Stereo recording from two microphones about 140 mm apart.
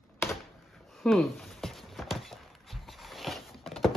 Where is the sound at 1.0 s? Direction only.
Centre (ahead or behind).